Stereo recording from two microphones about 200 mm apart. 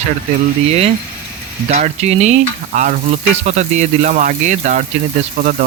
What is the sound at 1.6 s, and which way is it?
Speech, 35° right (ahead or behind).